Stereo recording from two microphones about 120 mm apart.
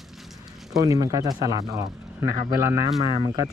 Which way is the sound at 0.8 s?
30° right (ahead or behind).